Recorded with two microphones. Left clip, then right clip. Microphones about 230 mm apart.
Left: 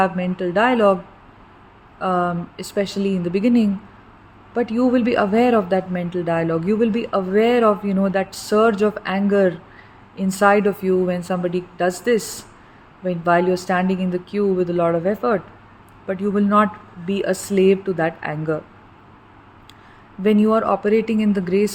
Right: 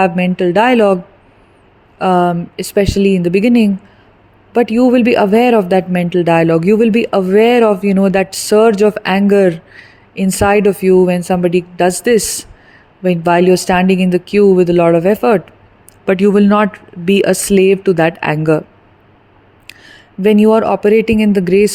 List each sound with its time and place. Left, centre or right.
0.0 s speech: right
2.0 s speech: right
20.2 s speech: right